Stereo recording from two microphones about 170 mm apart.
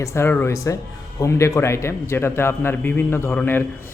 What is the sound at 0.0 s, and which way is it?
A man's voice, 15° left (ahead or behind).